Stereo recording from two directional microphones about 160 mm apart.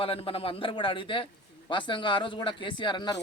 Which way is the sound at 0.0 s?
35° left (ahead or behind).